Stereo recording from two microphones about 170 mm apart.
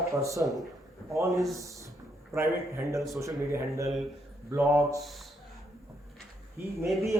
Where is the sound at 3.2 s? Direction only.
15° right (ahead or behind).